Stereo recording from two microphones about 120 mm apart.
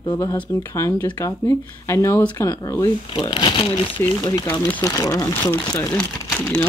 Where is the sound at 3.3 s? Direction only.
45° left (ahead or behind).